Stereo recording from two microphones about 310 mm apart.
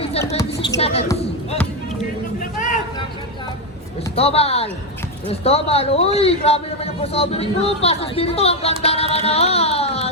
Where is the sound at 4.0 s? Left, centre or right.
Centre.